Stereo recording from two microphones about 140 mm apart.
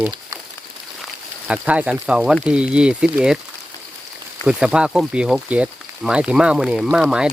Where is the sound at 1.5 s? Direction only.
10° right (ahead or behind).